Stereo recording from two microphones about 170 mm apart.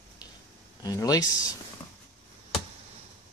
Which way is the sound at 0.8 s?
20° left (ahead or behind).